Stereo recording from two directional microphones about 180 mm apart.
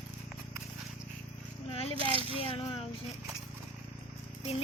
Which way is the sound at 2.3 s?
30° left (ahead or behind).